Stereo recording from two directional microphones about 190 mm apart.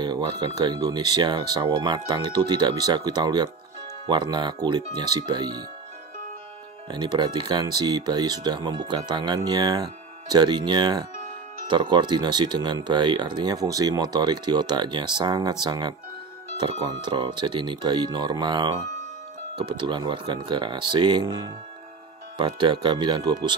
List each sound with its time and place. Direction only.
0.0 s speech: 20° right (ahead or behind)
6.9 s speech: 25° right (ahead or behind)